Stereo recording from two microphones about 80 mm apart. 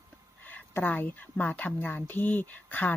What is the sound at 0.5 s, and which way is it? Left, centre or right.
A woman's voice, left.